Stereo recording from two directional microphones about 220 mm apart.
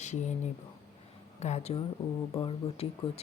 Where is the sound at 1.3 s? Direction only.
30° left (ahead or behind).